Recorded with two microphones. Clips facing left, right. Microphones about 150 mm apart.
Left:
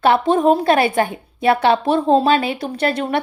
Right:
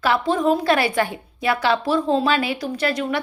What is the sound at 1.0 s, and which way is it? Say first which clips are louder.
Speech: left 4 dB; 25° left (ahead or behind).